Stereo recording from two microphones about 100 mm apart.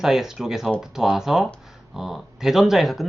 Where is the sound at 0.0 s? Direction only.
5° right (ahead or behind).